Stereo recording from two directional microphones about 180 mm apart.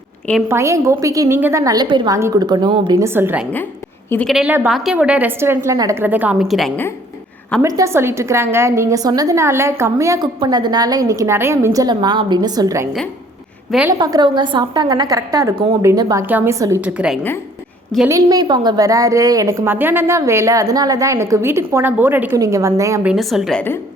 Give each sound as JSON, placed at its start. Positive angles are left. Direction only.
{"t": 0.4, "sound": "a woman's voice", "side_deg": -15}
{"t": 3.0, "sound": "a woman's voice", "side_deg": -10}
{"t": 6.4, "sound": "a woman's voice", "side_deg": 0}
{"t": 7.6, "sound": "a woman's voice", "side_deg": -15}
{"t": 13.7, "sound": "a woman's voice", "side_deg": -5}
{"t": 14.0, "sound": "a woman's voice", "side_deg": -25}
{"t": 18.1, "sound": "a woman's voice", "side_deg": -20}
{"t": 23.0, "sound": "a woman's voice", "side_deg": 0}